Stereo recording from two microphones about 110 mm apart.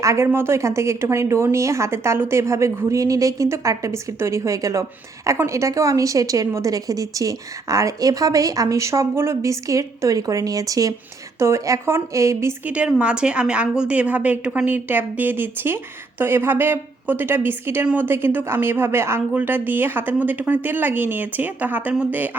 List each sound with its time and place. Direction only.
0.0 s speech: 25° right (ahead or behind)
12.6 s a woman's voice: 10° right (ahead or behind)